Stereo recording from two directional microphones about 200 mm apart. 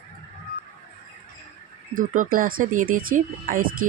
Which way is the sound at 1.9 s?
40° right (ahead or behind).